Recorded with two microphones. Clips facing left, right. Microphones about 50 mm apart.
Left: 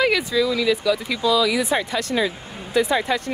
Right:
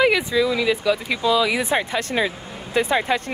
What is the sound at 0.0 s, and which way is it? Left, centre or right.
A woman's voice, centre.